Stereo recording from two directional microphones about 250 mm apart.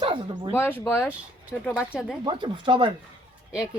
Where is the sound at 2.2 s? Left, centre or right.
Centre.